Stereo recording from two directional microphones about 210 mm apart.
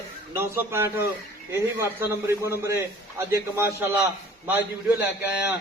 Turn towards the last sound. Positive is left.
turn(degrees=-10)  # may be behind; listen again after turning